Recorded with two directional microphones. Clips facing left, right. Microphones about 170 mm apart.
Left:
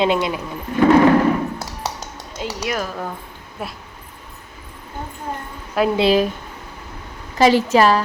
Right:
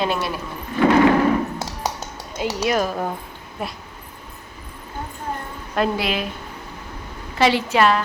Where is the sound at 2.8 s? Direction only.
25° right (ahead or behind).